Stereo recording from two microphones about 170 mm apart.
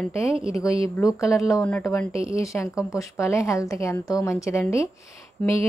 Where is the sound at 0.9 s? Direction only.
20° left (ahead or behind).